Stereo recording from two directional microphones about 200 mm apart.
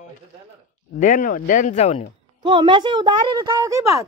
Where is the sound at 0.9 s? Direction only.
40° left (ahead or behind).